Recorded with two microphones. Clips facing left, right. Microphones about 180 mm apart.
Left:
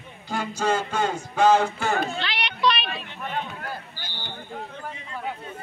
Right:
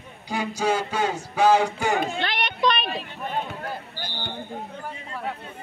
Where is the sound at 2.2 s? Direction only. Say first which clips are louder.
Right 1 dB; 50° right (ahead or behind).